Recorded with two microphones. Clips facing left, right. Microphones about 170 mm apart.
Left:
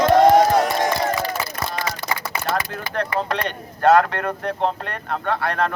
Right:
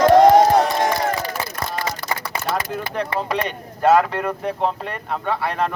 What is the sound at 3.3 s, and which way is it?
Speech, 5° right (ahead or behind).